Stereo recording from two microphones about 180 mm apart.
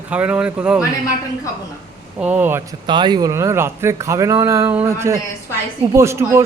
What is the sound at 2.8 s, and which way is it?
A man's voice, 25° right (ahead or behind).